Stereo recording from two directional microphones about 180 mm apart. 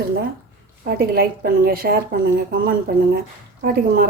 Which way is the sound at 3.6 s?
55° right (ahead or behind).